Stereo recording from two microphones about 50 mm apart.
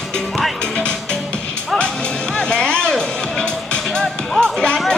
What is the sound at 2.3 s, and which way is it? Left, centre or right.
Music, centre.